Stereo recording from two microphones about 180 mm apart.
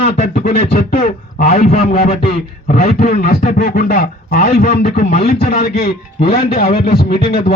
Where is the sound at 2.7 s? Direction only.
60° left (ahead or behind).